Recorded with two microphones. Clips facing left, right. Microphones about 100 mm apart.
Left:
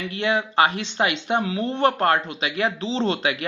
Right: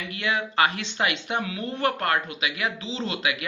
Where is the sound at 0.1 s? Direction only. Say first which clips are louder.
Left 4 dB; 25° left (ahead or behind).